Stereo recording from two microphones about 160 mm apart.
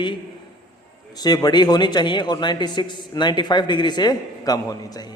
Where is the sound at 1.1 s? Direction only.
25° left (ahead or behind).